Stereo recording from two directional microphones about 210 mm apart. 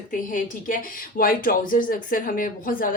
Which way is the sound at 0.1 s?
40° left (ahead or behind).